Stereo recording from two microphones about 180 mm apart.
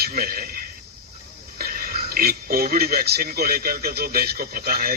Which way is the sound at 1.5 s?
55° right (ahead or behind).